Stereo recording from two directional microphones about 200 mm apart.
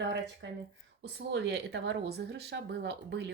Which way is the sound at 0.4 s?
60° right (ahead or behind).